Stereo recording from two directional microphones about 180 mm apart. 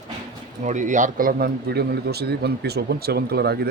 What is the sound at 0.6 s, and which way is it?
A man's voice, 45° right (ahead or behind).